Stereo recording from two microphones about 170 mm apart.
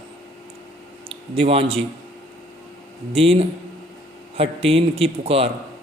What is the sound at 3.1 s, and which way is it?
A man's voice, 35° right (ahead or behind).